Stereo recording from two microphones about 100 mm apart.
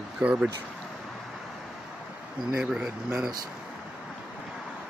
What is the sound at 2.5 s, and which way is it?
Speech, 10° right (ahead or behind).